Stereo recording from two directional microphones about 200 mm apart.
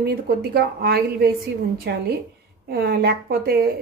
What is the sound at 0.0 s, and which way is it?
A woman's voice, 50° right (ahead or behind).